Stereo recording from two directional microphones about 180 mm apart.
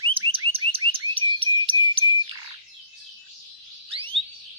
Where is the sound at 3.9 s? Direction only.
30° right (ahead or behind).